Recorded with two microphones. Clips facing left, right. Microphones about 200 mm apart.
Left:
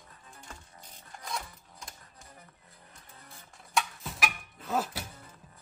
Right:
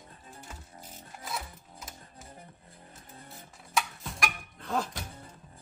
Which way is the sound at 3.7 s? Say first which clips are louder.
Even; centre (ahead or behind).